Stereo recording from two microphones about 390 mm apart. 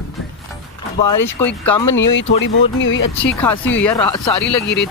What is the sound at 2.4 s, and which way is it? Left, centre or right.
Speech, left.